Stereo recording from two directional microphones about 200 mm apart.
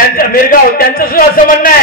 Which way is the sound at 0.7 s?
45° left (ahead or behind).